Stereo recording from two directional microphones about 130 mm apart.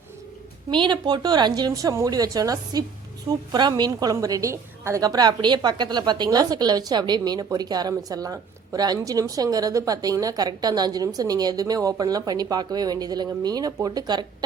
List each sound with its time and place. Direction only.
0.7 s a woman's voice: 35° right (ahead or behind)